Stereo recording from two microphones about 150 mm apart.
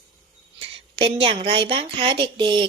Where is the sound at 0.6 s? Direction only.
35° right (ahead or behind).